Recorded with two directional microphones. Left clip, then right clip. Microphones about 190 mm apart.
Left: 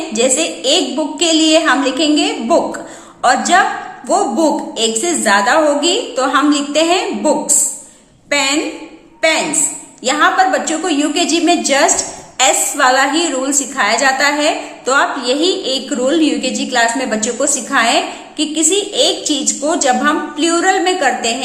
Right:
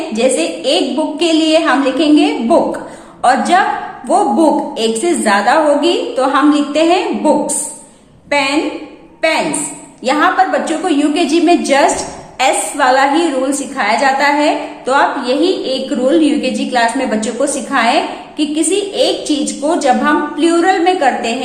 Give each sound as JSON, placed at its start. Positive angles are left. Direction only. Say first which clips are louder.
{"t": 0.1, "sound": "a woman's voice", "louder": "right 1 dB", "side_deg": 25}
{"t": 10.0, "sound": "a woman's voice", "louder": "even", "side_deg": 20}